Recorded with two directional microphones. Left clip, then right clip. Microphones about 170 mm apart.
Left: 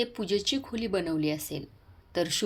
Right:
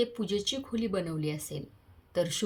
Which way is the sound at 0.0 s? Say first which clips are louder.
Left 2 dB; 20° left (ahead or behind).